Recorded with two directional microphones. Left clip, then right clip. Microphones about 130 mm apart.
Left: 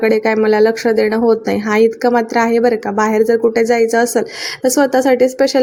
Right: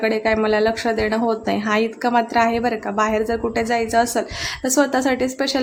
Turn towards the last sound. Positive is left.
turn(degrees=30)  # may be behind; listen again after turning